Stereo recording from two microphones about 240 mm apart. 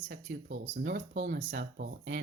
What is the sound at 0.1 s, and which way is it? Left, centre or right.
Speech, right.